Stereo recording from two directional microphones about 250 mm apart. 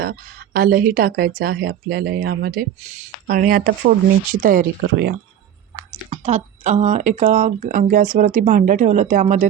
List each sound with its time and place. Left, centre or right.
0.0 s speech: right
6.1 s speech: right